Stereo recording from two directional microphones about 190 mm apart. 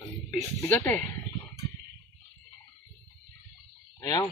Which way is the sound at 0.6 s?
10° left (ahead or behind).